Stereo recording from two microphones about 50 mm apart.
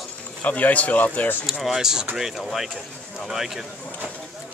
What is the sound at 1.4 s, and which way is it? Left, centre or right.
Speech, centre.